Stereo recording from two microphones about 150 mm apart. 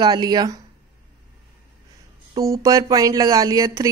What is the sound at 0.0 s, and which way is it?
Speech, 30° right (ahead or behind).